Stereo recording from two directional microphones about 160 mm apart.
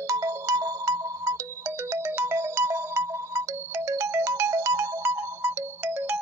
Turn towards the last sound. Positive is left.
turn(degrees=-10)  # may be behind; listen again after turning